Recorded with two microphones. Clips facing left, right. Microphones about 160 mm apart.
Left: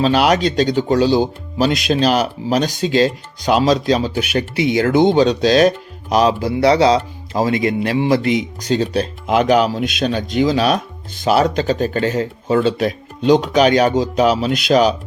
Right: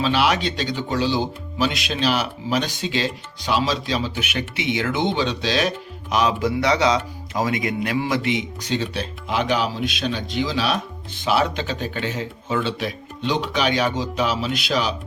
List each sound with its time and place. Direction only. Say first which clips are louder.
0.0 s speech: left 6 dB; 40° left (ahead or behind)
8.2 s speech: left 6 dB; 40° left (ahead or behind)